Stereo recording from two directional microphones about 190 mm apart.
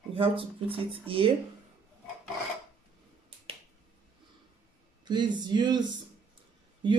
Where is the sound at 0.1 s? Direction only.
30° right (ahead or behind).